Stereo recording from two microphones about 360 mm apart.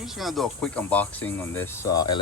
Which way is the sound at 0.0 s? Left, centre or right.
Centre.